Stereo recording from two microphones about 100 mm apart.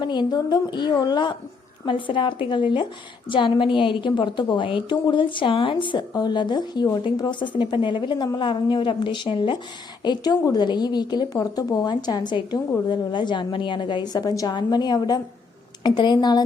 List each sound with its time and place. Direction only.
0.0 s a woman's voice: 45° left (ahead or behind)